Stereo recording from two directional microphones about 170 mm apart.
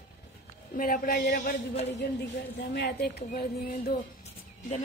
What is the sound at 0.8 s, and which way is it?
Speech, 55° left (ahead or behind).